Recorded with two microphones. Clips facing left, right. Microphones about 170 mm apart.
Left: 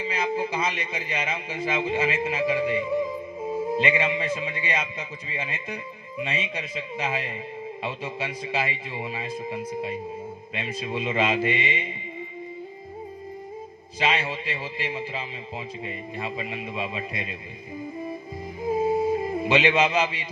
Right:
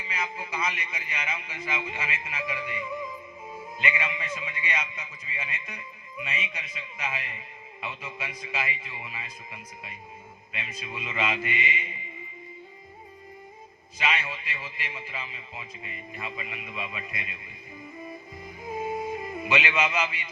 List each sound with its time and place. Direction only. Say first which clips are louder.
0.0 s a man's voice: left 9 dB; 30° left (ahead or behind)
14.0 s a man's voice: left 5 dB; 30° left (ahead or behind)
18.6 s music: left 9 dB; 30° left (ahead or behind)